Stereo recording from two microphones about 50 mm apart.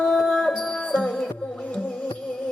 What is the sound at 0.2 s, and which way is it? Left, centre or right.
Music, centre.